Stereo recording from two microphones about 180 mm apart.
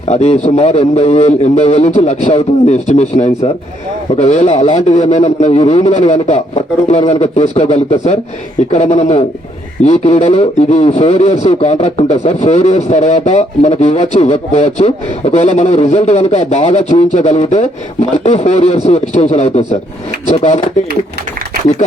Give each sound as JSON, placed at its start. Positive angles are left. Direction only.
{"t": 0.1, "sound": "a man's voice", "side_deg": 40}